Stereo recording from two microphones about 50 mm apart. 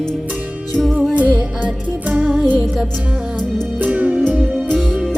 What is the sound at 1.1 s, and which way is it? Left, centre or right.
Music, right.